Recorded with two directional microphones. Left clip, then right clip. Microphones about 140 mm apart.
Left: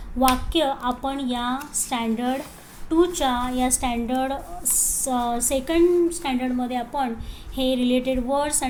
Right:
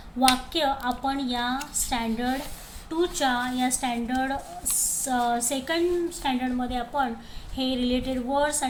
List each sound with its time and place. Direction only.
0.2 s a woman's voice: 10° left (ahead or behind)